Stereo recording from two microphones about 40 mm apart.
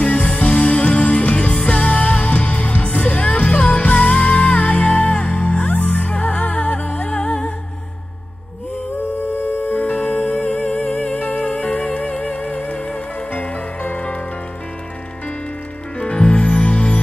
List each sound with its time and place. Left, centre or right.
0.2 s music: left
9.7 s music: left
16.0 s music: left